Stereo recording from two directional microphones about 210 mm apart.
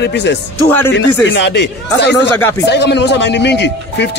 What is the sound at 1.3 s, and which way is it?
Speech, 55° left (ahead or behind).